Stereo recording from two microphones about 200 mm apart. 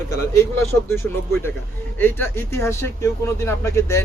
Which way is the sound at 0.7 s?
15° left (ahead or behind).